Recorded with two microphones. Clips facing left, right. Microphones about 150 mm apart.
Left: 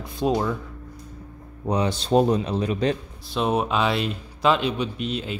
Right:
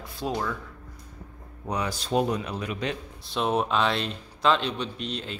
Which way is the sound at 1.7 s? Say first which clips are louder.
Left 6 dB; 25° left (ahead or behind).